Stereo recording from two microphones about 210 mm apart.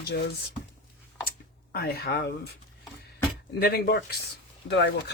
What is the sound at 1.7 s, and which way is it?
Speech, 50° left (ahead or behind).